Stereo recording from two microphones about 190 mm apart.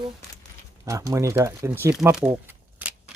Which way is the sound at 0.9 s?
15° right (ahead or behind).